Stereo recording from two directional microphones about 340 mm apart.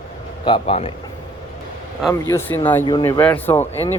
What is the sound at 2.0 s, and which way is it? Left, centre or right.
Speech, centre.